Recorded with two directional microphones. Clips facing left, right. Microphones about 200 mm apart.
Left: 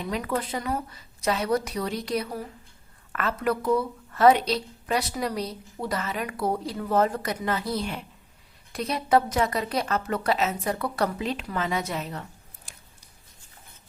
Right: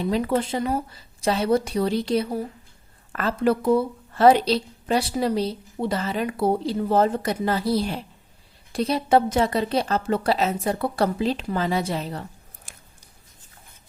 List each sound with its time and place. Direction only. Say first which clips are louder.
0.0 s a woman's voice: right 6 dB; 30° right (ahead or behind)